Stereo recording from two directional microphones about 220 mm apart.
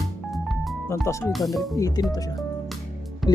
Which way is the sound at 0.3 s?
Centre (ahead or behind).